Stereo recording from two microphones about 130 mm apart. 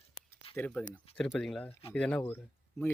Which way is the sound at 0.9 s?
10° left (ahead or behind).